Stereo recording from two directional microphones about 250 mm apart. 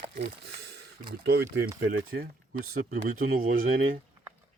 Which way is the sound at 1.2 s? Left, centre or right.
Right.